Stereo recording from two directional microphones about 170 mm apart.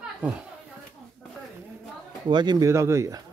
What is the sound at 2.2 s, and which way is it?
Speech, 25° right (ahead or behind).